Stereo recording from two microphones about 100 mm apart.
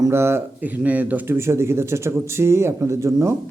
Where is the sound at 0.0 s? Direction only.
25° right (ahead or behind).